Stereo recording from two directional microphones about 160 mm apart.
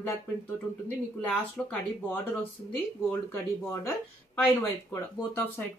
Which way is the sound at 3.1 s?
15° left (ahead or behind).